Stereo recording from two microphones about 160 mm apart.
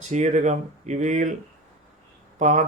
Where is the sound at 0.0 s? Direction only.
45° right (ahead or behind).